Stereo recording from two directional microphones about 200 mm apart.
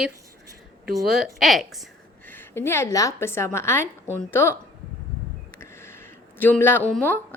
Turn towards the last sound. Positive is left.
turn(degrees=10)  # may be behind; listen again after turning